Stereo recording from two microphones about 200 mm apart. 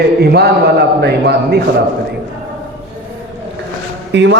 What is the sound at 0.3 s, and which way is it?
A man's voice, 55° right (ahead or behind).